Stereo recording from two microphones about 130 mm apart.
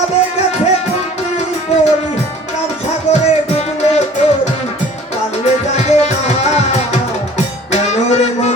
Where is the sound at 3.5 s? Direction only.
55° left (ahead or behind).